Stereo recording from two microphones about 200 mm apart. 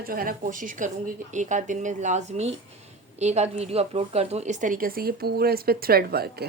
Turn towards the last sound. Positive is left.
turn(degrees=-50)  # may be behind; listen again after turning